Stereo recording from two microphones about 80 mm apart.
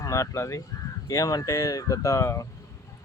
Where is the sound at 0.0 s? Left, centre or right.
Left.